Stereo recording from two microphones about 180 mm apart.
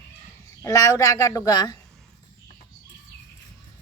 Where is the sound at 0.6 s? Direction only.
15° left (ahead or behind).